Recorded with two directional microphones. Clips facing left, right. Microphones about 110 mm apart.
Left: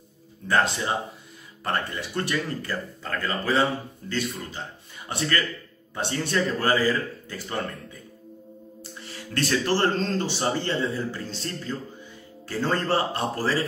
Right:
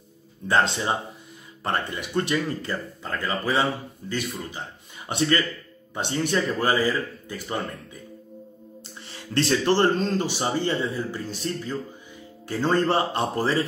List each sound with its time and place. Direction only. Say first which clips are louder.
0.5 s a man's voice: right 1 dB; 25° right (ahead or behind)
9.3 s a man's voice: right 3 dB; 25° right (ahead or behind)